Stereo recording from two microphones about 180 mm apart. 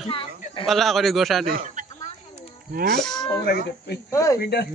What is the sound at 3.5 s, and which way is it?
Speech, 60° left (ahead or behind).